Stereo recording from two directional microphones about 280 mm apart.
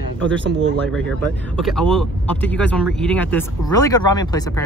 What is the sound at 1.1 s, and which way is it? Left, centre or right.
Speech, centre.